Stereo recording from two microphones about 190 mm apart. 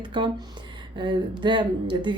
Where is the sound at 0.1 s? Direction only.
25° right (ahead or behind).